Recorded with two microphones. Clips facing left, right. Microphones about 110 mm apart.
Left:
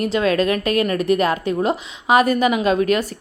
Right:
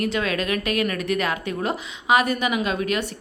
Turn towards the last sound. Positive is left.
turn(degrees=40)  # may be behind; listen again after turning